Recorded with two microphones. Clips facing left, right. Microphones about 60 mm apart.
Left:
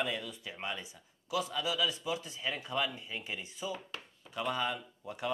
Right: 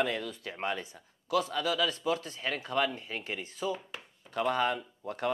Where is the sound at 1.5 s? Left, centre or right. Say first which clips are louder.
Right 3 dB; right.